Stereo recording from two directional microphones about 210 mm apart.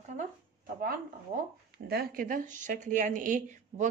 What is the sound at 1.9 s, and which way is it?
Speech, 45° right (ahead or behind).